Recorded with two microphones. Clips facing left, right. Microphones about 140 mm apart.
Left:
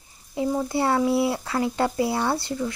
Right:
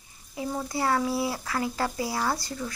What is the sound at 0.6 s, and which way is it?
Speech, 25° left (ahead or behind).